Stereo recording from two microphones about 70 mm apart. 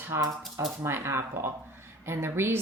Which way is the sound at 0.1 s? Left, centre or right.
Right.